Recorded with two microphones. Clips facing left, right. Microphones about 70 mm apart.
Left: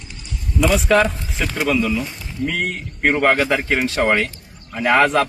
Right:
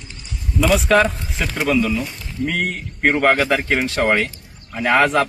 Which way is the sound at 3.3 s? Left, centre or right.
Left.